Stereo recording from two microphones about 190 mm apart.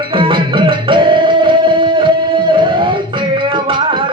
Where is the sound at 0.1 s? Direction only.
25° right (ahead or behind).